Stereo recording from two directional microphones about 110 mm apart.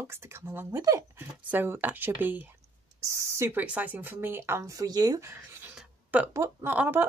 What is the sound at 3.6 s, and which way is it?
Speech, 15° right (ahead or behind).